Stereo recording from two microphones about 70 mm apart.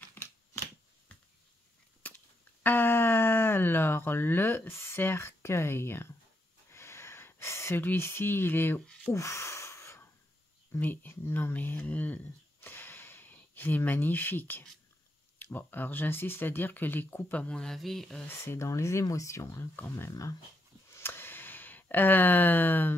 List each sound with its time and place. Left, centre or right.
2.0 s a sound: left
2.6 s speech: left
6.7 s a sound: left
7.7 s speech: left
9.1 s gasp: left
10.8 s speech: left
12.5 s a sound: left
15.3 s speech: left
17.4 s speech: centre
18.4 s speech: left
20.1 s speech: left
20.9 s a sound: left